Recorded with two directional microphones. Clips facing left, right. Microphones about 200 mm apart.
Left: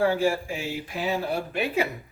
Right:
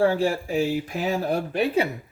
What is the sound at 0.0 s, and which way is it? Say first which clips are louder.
Speech: right 2 dB; 35° right (ahead or behind).